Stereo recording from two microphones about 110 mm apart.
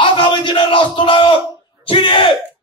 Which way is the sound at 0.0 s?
50° left (ahead or behind).